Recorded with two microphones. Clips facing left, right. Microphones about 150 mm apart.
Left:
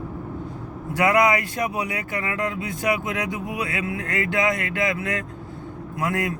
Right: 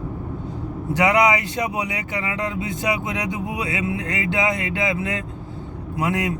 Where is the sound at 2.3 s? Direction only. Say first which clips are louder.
Right 1 dB; 20° right (ahead or behind).